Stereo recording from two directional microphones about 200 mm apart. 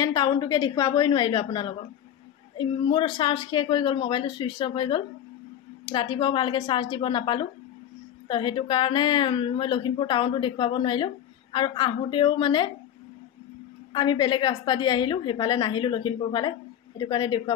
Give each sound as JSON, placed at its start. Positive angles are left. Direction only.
{"t": 0.0, "sound": "a woman's voice", "side_deg": 20}
{"t": 13.9, "sound": "a woman's voice", "side_deg": 20}